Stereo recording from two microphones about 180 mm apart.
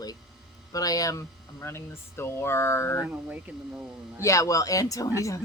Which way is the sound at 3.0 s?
10° right (ahead or behind).